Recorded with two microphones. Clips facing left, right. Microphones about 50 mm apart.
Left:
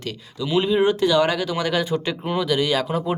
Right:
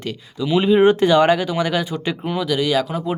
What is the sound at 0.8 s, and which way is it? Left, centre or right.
Speech, right.